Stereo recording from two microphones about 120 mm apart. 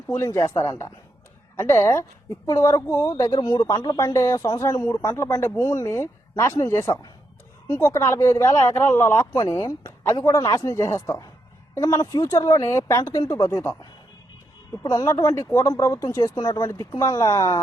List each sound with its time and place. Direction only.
0.1 s speech: 25° left (ahead or behind)
14.8 s speech: 25° left (ahead or behind)